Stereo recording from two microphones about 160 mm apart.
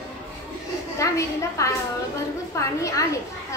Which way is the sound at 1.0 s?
20° left (ahead or behind).